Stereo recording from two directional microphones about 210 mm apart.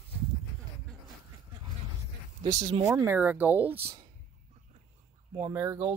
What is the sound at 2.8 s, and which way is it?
Speech, 15° right (ahead or behind).